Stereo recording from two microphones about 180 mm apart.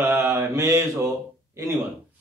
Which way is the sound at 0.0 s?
15° right (ahead or behind).